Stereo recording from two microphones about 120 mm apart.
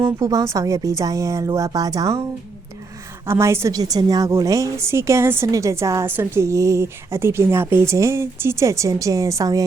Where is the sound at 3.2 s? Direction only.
20° right (ahead or behind).